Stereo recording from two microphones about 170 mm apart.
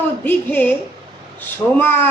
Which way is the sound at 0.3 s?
10° left (ahead or behind).